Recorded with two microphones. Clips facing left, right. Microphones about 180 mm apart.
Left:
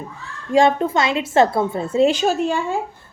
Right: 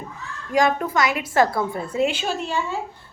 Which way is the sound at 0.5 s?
25° left (ahead or behind).